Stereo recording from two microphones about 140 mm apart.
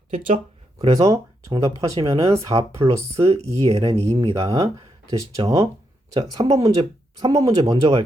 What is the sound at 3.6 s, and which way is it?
Speech, 45° right (ahead or behind).